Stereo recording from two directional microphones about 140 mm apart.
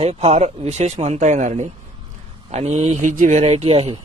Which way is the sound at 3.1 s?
65° right (ahead or behind).